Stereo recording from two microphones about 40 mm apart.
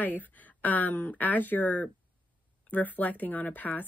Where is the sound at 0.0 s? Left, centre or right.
Left.